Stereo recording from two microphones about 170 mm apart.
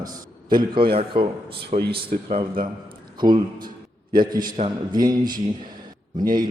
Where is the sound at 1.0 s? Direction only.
35° right (ahead or behind).